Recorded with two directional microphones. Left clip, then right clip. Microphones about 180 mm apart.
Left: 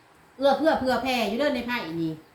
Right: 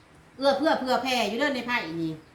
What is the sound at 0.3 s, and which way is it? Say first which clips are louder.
A woman's voice: left 2 dB; 15° right (ahead or behind).